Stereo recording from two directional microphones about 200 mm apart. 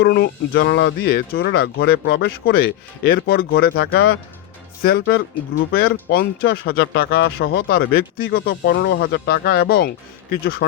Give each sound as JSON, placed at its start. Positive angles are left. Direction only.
{"t": 0.0, "sound": "speech", "side_deg": 55}